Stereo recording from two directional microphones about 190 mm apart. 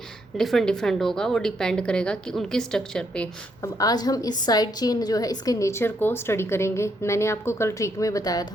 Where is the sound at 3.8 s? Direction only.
20° left (ahead or behind).